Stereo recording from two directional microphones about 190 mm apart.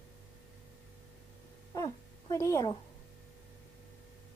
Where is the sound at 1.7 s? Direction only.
15° left (ahead or behind).